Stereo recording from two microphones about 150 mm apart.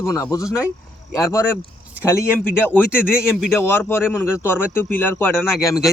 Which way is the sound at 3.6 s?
15° left (ahead or behind).